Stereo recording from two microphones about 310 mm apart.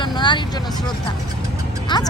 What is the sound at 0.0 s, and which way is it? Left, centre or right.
Vehicle, centre.